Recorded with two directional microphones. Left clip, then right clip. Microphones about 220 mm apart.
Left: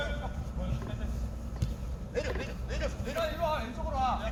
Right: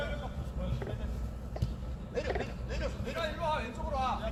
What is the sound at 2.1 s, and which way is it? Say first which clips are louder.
Vehicle: even; 10° left (ahead or behind).